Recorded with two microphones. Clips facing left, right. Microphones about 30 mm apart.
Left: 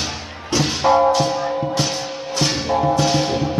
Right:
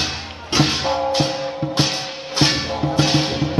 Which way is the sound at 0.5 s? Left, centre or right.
Right.